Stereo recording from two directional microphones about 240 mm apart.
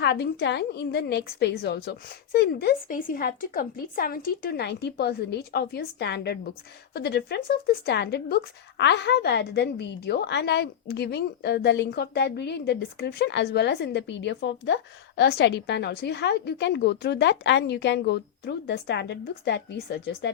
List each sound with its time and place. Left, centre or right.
0.0 s a woman's voice: left